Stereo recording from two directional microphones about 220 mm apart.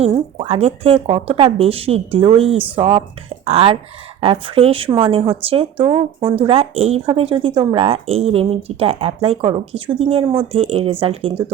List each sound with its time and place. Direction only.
0.0 s speech: 25° right (ahead or behind)